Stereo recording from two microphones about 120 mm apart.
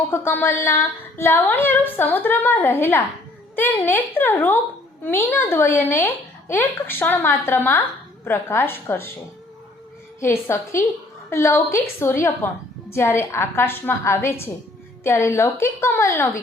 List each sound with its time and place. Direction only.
0.1 s speech: 20° left (ahead or behind)
10.2 s a woman's voice: 20° left (ahead or behind)